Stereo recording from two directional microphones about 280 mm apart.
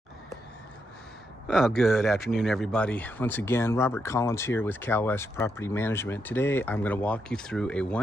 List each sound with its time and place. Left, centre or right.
1.5 s speech: centre